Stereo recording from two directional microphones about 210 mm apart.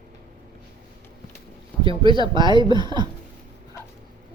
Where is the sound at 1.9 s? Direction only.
25° right (ahead or behind).